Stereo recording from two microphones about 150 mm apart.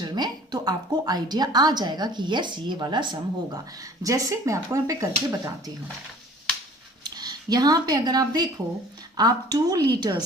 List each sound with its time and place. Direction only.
0.0 s a woman's voice: 30° right (ahead or behind)
7.0 s a woman's voice: 25° right (ahead or behind)